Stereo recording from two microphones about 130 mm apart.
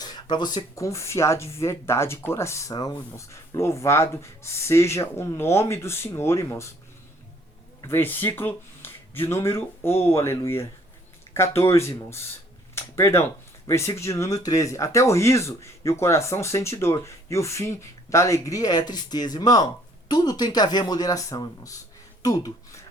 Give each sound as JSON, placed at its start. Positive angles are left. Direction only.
{"t": 0.0, "sound": "speech", "side_deg": 35}
{"t": 7.8, "sound": "speech", "side_deg": 20}